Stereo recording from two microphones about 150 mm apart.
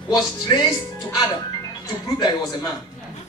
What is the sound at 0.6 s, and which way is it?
Speech, 25° left (ahead or behind).